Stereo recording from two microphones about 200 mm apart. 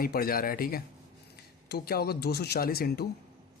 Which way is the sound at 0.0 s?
50° left (ahead or behind).